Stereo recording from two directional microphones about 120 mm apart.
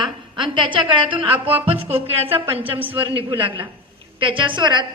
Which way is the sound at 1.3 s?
15° right (ahead or behind).